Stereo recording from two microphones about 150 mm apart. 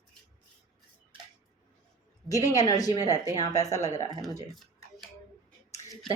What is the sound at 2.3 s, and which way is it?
Speech, 25° left (ahead or behind).